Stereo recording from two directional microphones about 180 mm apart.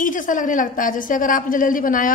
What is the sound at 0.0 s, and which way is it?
A woman's voice, 45° left (ahead or behind).